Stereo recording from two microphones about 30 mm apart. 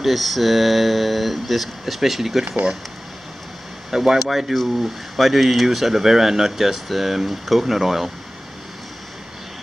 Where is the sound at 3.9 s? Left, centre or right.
Centre.